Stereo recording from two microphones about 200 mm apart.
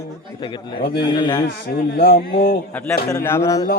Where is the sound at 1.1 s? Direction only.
20° left (ahead or behind).